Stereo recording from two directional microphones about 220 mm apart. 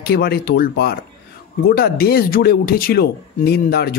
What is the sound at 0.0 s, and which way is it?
Speech, 45° left (ahead or behind).